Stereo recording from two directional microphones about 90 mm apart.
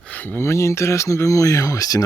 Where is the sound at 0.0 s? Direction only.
20° left (ahead or behind).